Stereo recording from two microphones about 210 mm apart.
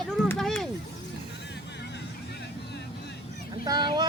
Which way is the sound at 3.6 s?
20° right (ahead or behind).